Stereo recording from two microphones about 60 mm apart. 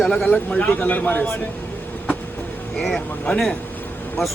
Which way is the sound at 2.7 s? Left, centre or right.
Centre.